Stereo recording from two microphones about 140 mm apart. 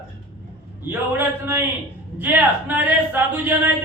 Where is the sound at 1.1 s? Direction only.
15° right (ahead or behind).